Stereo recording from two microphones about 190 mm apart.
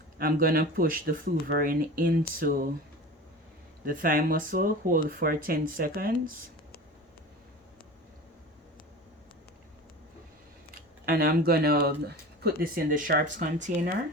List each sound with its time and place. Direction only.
0.2 s speech: 50° right (ahead or behind)
3.8 s speech: 45° right (ahead or behind)
10.8 s speech: 50° right (ahead or behind)